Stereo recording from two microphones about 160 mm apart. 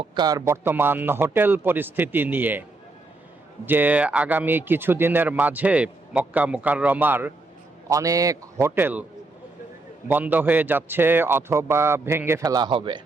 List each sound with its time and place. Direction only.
0.0 s speech: 30° right (ahead or behind); by 2.6 s 10° right (ahead or behind)
3.7 s a man's voice: 10° right (ahead or behind)
10.1 s speech: 10° right (ahead or behind); by 13.0 s 30° right (ahead or behind)